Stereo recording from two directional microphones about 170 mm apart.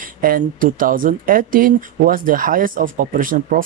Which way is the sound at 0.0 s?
55° right (ahead or behind).